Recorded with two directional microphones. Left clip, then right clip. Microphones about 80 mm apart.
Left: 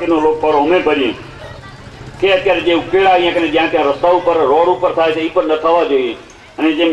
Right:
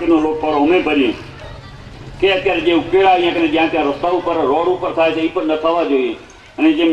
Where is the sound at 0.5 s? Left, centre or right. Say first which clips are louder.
Even; left.